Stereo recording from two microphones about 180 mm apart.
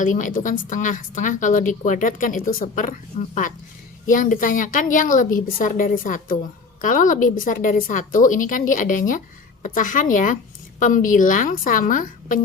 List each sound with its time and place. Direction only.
0.0 s a woman's voice: 45° left (ahead or behind)